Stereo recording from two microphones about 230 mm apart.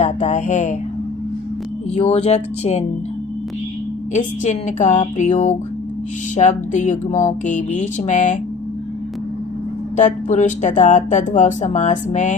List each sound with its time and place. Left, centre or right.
0.0 s speech: left
2.0 s speech: left
4.2 s speech: left
10.0 s speech: left